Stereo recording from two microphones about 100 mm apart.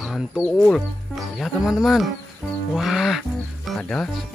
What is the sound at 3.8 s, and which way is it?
Speech, 10° left (ahead or behind).